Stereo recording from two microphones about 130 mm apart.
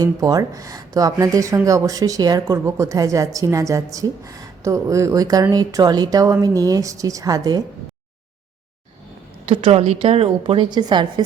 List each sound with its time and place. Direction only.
0.0 s speech: 25° right (ahead or behind)
9.5 s a woman's voice: 45° right (ahead or behind)